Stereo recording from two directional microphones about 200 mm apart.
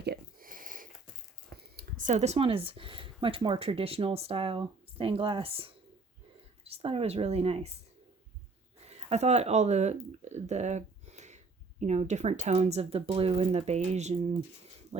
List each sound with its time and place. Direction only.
0.0 s a sound: 50° right (ahead or behind)
1.6 s speech: 45° right (ahead or behind); by 7.7 s 30° right (ahead or behind)
8.8 s speech: 30° right (ahead or behind)